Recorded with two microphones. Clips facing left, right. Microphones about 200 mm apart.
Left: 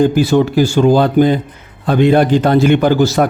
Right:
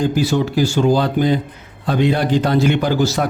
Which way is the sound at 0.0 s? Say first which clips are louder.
Left 6 dB; 55° left (ahead or behind).